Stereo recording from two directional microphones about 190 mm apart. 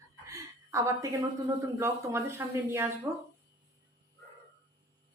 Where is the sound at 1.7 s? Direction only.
15° right (ahead or behind).